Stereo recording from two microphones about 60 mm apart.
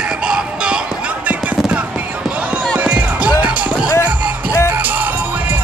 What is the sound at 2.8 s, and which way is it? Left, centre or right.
Music, right.